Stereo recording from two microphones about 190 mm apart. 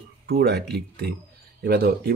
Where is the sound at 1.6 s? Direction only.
60° right (ahead or behind).